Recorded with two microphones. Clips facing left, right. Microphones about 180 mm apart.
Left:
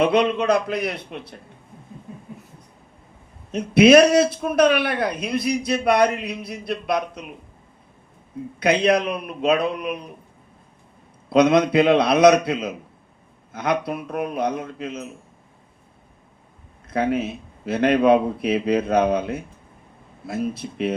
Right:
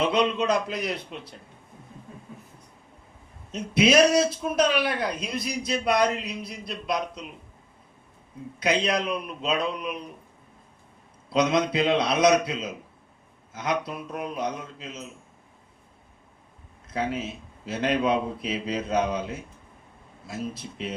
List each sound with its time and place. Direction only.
0.0 s a man's voice: 60° left (ahead or behind)
3.5 s a man's voice: 60° left (ahead or behind)
8.5 s a man's voice: 60° left (ahead or behind)
11.3 s a man's voice: 60° left (ahead or behind)
16.9 s a man's voice: 60° left (ahead or behind)